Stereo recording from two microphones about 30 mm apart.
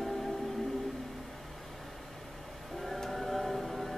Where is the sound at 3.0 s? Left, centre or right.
Centre.